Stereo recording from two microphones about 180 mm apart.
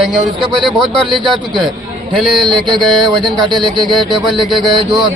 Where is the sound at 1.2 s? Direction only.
25° right (ahead or behind).